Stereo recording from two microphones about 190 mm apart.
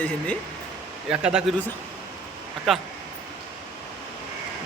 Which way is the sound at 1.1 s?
5° right (ahead or behind).